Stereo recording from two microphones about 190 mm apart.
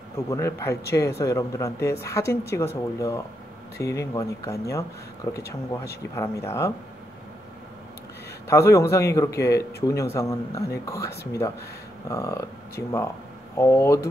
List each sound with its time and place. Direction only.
0.3 s speech: 15° left (ahead or behind)
8.5 s speech: 15° left (ahead or behind)